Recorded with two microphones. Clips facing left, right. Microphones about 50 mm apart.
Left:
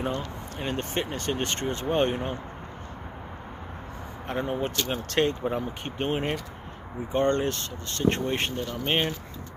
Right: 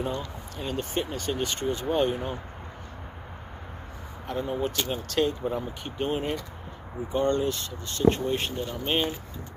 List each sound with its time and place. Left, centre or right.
0.0 s speech: left
4.3 s speech: left